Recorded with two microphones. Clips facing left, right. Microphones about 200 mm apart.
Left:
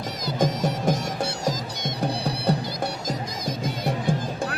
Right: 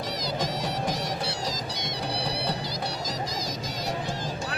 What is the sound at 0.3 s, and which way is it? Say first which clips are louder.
Music: left 8 dB; 50° left (ahead or behind).